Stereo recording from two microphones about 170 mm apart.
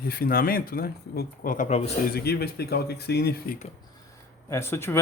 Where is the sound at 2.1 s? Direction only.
65° left (ahead or behind).